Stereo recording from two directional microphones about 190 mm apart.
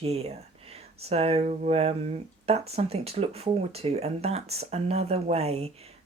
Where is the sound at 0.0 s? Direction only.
30° right (ahead or behind).